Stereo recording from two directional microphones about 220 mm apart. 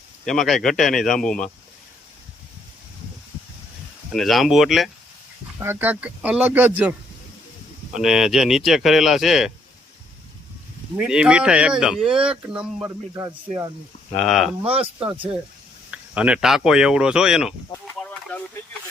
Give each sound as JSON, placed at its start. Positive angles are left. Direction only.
{"t": 0.3, "sound": "speech", "side_deg": 0}
{"t": 4.1, "sound": "speech", "side_deg": 0}
{"t": 7.9, "sound": "speech", "side_deg": 0}
{"t": 10.9, "sound": "speech", "side_deg": -5}
{"t": 13.2, "sound": "speech", "side_deg": -15}
{"t": 14.2, "sound": "speech", "side_deg": 0}
{"t": 14.6, "sound": "speech", "side_deg": -25}
{"t": 15.9, "sound": "speech", "side_deg": -5}